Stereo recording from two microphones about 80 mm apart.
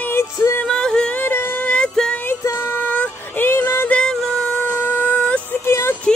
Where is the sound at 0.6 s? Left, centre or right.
Centre.